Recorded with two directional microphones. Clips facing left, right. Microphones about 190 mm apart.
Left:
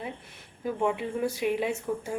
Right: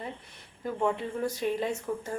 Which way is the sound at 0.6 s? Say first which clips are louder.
Left 1 dB; 5° left (ahead or behind).